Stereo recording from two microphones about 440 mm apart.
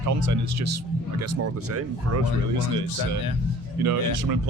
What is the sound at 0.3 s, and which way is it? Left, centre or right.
Speech, right.